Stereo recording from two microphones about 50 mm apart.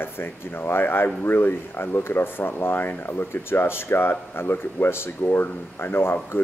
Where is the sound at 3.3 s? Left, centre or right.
Left.